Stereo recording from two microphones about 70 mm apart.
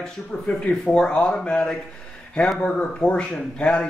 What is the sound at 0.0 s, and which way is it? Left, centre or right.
Speech, centre.